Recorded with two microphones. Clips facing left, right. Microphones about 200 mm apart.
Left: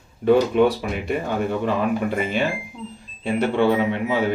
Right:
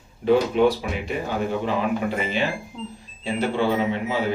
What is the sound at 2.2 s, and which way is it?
Speech, 50° left (ahead or behind).